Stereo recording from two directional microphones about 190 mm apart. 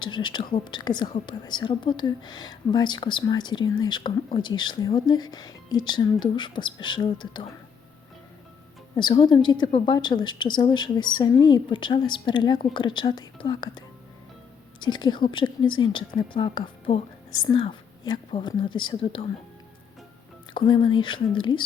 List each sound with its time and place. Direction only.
0.0 s a woman's voice: 25° left (ahead or behind)
9.0 s a woman's voice: 25° left (ahead or behind)
20.5 s a woman's voice: 25° left (ahead or behind)